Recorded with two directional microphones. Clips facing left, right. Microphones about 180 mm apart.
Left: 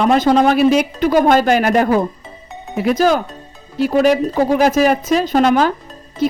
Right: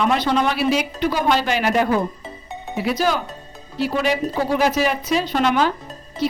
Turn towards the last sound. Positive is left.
turn(degrees=50)  # may be behind; listen again after turning